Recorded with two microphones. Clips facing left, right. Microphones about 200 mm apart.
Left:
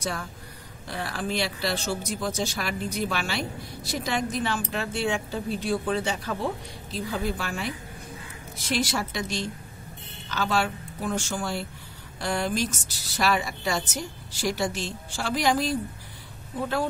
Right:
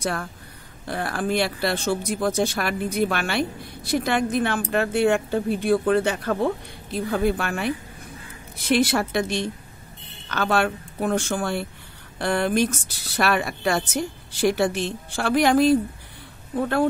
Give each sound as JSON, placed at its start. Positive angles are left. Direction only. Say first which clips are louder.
{"t": 0.0, "sound": "speech", "louder": "right 5 dB", "side_deg": -55}